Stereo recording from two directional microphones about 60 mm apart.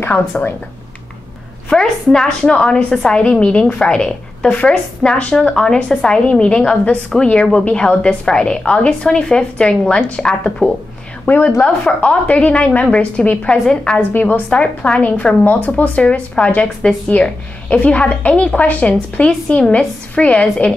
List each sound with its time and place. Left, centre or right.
0.3 s speech: left
1.7 s a woman's voice: centre
11.2 s a woman's voice: left
11.6 s a woman's voice: centre
14.1 s speech: left
14.5 s speech: centre